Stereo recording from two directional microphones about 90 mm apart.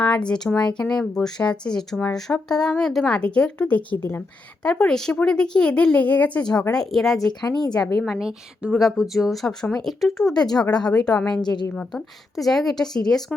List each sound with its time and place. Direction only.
0.0 s a woman's voice: 10° left (ahead or behind)
4.6 s speech: 10° left (ahead or behind)
7.4 s a woman's voice: 45° left (ahead or behind)
8.0 s speech: 5° right (ahead or behind)
10.3 s a woman's voice: 50° left (ahead or behind)
10.8 s speech: 10° left (ahead or behind)
11.4 s a woman's voice: 50° left (ahead or behind)
11.9 s speech: 5° left (ahead or behind)